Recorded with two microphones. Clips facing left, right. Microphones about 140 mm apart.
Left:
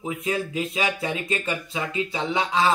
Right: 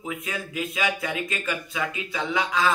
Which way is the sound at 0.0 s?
25° left (ahead or behind).